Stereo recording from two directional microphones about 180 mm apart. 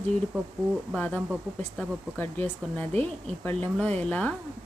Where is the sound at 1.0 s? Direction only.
10° left (ahead or behind).